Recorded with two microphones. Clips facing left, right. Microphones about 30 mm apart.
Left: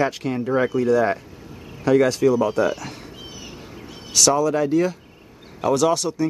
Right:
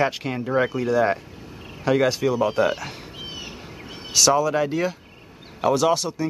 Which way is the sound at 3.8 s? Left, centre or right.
Right.